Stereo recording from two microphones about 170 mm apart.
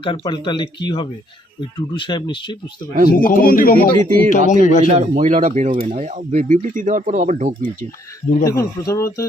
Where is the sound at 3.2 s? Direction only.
55° left (ahead or behind).